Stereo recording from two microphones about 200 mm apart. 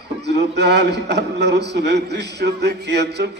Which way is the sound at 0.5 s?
55° right (ahead or behind).